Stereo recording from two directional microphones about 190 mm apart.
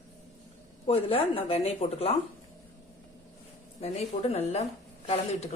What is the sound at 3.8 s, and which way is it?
Speech, 35° left (ahead or behind).